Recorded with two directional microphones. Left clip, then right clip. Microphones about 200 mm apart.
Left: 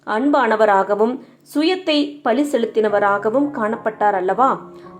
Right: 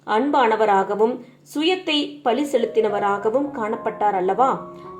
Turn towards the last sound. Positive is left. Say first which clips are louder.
# left 2 dB
turn(degrees=35)  # may be behind; listen again after turning